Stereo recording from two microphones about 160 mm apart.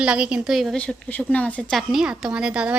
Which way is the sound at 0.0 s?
5° right (ahead or behind).